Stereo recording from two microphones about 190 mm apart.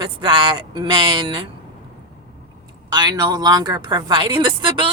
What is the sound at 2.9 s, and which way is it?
Speech, 20° right (ahead or behind).